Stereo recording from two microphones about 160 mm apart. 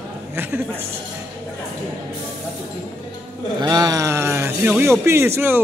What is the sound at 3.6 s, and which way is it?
Speech, 25° right (ahead or behind).